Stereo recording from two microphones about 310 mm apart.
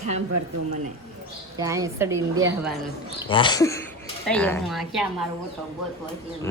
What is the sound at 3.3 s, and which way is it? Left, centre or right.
Speech, centre.